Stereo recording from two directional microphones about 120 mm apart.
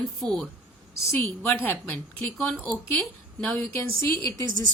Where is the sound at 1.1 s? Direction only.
20° left (ahead or behind).